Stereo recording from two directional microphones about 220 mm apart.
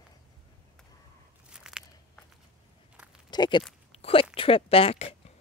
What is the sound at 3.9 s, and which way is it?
Zipper, 25° left (ahead or behind).